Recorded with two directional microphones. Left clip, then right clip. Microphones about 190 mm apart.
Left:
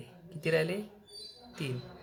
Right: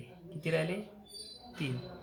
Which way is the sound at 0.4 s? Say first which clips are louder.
Left 3 dB; 35° left (ahead or behind).